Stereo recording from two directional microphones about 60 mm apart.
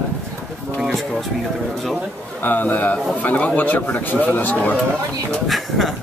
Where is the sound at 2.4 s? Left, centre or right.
Left.